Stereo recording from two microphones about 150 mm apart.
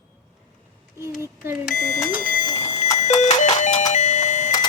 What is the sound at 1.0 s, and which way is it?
Speech, 20° right (ahead or behind).